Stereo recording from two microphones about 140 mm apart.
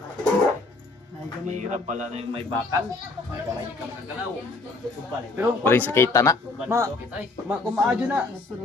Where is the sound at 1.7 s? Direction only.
60° right (ahead or behind).